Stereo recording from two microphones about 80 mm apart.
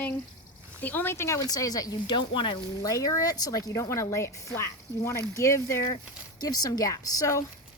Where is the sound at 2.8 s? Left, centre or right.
Left.